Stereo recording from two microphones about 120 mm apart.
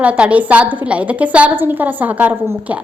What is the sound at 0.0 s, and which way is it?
A woman's voice, 10° right (ahead or behind).